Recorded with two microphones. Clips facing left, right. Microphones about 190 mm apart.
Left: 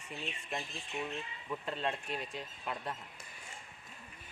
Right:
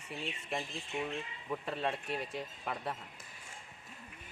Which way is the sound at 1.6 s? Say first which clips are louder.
Even; 5° right (ahead or behind).